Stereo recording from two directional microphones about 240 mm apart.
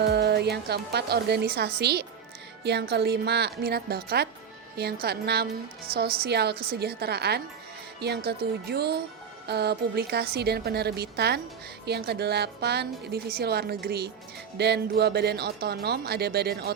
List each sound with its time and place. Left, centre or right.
0.0 s a woman's voice: right